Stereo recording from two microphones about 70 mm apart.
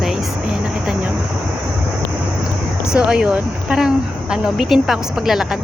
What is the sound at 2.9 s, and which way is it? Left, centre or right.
Speech, centre.